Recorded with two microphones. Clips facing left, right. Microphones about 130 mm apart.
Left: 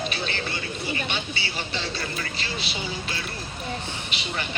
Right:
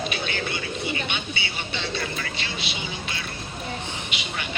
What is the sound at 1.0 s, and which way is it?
Vehicle, 35° left (ahead or behind).